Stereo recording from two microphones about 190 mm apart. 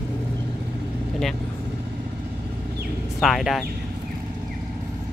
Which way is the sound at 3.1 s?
Centre (ahead or behind).